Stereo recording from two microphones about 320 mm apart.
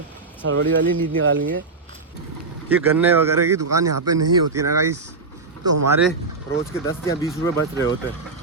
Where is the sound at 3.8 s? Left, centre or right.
Right.